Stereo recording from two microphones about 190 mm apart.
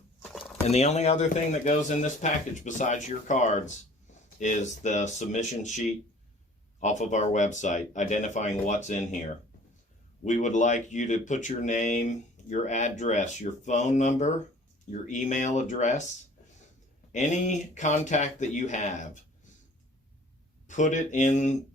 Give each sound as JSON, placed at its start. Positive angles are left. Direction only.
{"t": 0.7, "sound": "speech", "side_deg": 35}
{"t": 10.2, "sound": "speech", "side_deg": 40}
{"t": 17.1, "sound": "speech", "side_deg": 40}
{"t": 20.7, "sound": "speech", "side_deg": 40}